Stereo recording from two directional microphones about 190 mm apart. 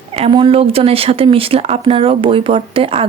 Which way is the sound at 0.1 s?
30° right (ahead or behind).